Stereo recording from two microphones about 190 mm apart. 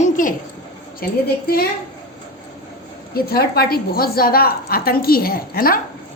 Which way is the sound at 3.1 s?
55° left (ahead or behind).